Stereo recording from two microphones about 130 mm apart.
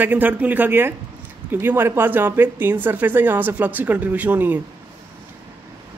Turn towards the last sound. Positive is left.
turn(degrees=-15)  # may be behind; listen again after turning